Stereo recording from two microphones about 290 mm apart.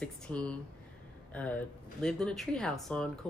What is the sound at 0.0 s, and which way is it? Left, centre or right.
Speech, centre.